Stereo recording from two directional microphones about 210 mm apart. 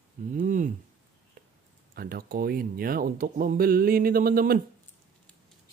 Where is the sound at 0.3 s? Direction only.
40° right (ahead or behind).